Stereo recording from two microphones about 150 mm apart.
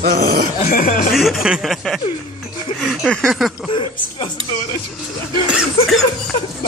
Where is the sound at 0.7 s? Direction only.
70° left (ahead or behind).